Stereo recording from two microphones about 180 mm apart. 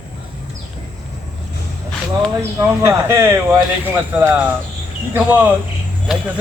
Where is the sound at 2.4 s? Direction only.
15° right (ahead or behind).